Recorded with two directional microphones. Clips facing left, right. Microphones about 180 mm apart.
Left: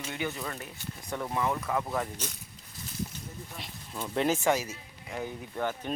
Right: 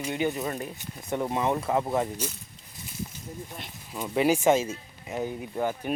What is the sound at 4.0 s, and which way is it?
Speech, 10° right (ahead or behind).